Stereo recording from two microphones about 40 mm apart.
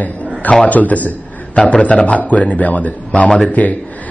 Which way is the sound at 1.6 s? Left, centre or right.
Left.